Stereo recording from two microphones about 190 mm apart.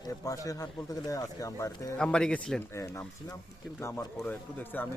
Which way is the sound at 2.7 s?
15° left (ahead or behind).